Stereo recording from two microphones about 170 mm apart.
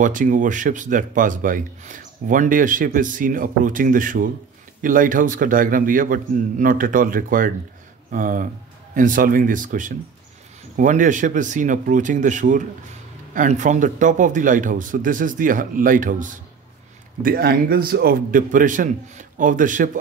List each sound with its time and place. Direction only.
0.0 s speech: 50° right (ahead or behind)
17.2 s a man's voice: 60° right (ahead or behind)